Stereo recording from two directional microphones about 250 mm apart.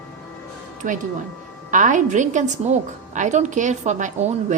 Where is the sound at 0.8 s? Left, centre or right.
Right.